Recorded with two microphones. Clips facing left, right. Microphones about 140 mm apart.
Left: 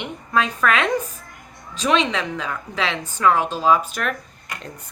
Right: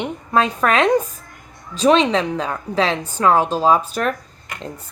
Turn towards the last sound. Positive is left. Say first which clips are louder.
# right 3 dB
turn(degrees=-35)  # may be behind; listen again after turning